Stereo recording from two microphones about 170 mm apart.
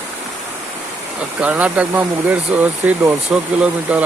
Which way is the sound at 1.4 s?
10° right (ahead or behind).